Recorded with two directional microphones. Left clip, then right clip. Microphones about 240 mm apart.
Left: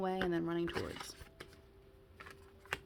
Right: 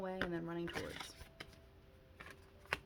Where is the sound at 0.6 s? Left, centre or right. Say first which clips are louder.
Left 5 dB; centre.